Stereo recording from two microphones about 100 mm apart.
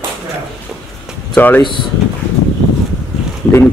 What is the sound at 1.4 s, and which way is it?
Speech, 15° left (ahead or behind).